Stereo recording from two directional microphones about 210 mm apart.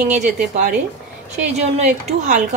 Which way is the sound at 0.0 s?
35° right (ahead or behind).